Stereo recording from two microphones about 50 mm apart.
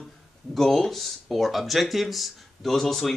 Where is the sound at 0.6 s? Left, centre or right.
Centre.